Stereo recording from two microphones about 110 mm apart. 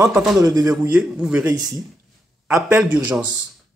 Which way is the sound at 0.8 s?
10° right (ahead or behind).